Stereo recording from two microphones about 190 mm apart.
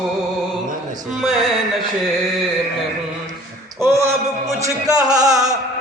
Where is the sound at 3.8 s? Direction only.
15° right (ahead or behind).